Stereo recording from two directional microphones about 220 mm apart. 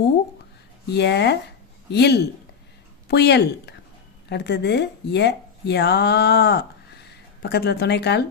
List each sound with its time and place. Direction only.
0.9 s speech: 50° left (ahead or behind)